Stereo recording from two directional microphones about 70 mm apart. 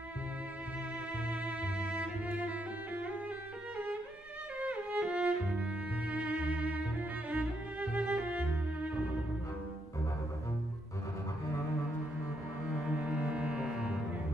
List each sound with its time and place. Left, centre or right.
1.3 s music: centre
3.7 s violin: right
4.6 s music: right
12.8 s music: centre